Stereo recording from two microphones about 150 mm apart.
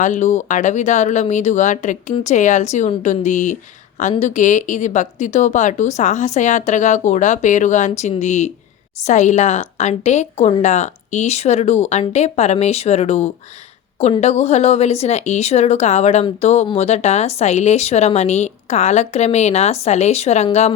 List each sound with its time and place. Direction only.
0.0 s speech: 55° left (ahead or behind)